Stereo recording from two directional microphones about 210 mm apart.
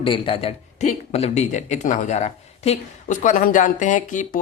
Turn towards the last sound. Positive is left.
turn(degrees=35)  # may be behind; listen again after turning